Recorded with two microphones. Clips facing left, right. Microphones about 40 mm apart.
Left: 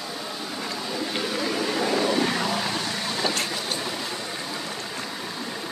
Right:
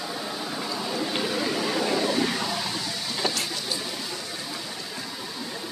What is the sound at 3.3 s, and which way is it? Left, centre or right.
Vehicle, left.